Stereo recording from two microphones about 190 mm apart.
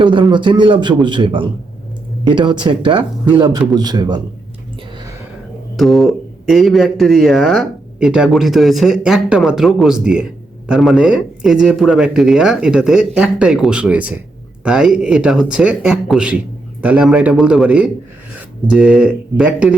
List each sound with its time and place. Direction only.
0.0 s a man's voice: 25° right (ahead or behind)
5.7 s speech: centre (ahead or behind)